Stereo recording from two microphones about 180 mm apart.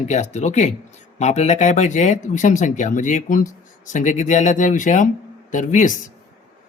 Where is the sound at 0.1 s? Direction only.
40° left (ahead or behind).